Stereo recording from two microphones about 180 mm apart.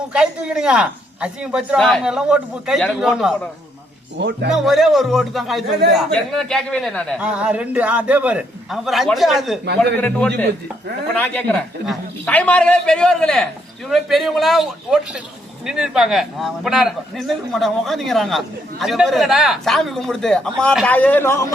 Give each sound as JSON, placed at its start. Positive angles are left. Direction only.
{"t": 0.1, "sound": "a man's voice", "side_deg": -5}
{"t": 4.2, "sound": "speech", "side_deg": -75}
{"t": 4.5, "sound": "a man's voice", "side_deg": 0}
{"t": 7.2, "sound": "a man's voice", "side_deg": -5}